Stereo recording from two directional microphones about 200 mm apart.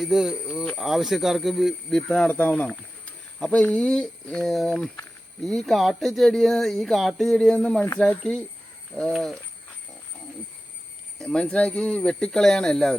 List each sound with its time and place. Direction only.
0.0 s speech: centre (ahead or behind)
11.2 s speech: centre (ahead or behind)